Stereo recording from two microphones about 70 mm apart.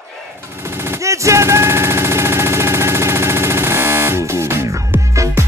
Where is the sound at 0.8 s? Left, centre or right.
Right.